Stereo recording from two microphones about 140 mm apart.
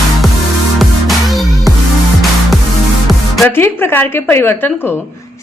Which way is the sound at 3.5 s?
15° left (ahead or behind).